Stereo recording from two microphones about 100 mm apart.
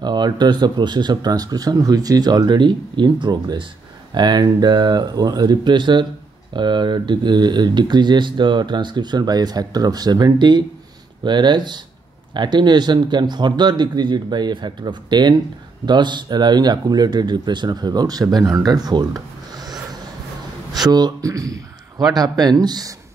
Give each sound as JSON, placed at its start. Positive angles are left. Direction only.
{"t": 0.0, "sound": "speech", "side_deg": -45}